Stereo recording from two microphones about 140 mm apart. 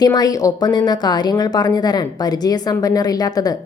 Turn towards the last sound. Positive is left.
turn(degrees=25)  # may be behind; listen again after turning